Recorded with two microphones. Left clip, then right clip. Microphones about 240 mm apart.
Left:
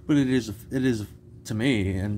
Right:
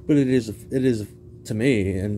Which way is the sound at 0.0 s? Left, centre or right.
Centre.